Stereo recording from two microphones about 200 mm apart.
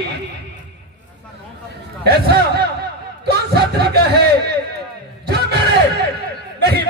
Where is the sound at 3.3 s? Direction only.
55° right (ahead or behind).